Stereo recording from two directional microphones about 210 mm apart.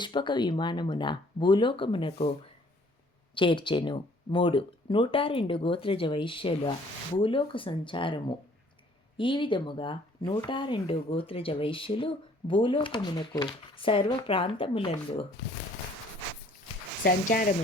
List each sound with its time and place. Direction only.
0.0 s speech: 20° left (ahead or behind)
3.3 s speech: 25° left (ahead or behind)
17.0 s speech: 40° left (ahead or behind)